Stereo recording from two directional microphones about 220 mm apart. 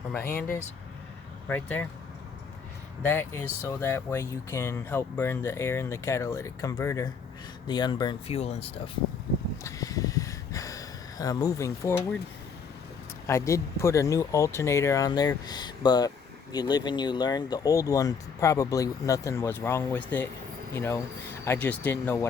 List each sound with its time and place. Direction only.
0.1 s speech: 10° left (ahead or behind)
1.5 s speech: 5° left (ahead or behind)
3.0 s speech: 10° left (ahead or behind); by 8.7 s 25° left (ahead or behind)
9.6 s a sound: 15° left (ahead or behind)
13.2 s speech: 10° left (ahead or behind)